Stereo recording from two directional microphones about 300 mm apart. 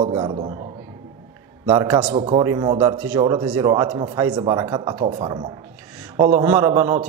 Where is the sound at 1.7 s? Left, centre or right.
Centre.